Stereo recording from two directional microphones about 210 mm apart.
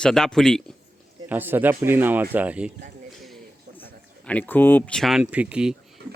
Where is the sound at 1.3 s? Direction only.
10° right (ahead or behind).